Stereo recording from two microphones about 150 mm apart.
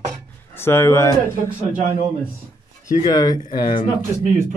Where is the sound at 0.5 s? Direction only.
15° left (ahead or behind).